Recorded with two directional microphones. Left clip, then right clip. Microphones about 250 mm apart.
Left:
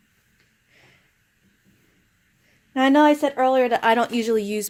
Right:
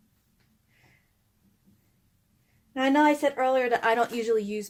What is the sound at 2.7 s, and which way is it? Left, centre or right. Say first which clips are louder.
Speech: left 6 dB; left.